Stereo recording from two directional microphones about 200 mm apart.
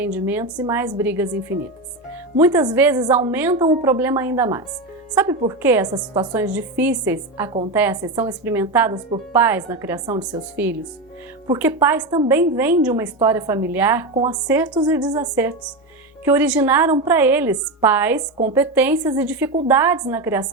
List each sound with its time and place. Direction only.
0.0 s a woman's voice: 10° right (ahead or behind)
6.4 s a woman's voice: 10° right (ahead or behind)
14.4 s speech: 10° right (ahead or behind)
15.0 s a woman's voice: 20° right (ahead or behind)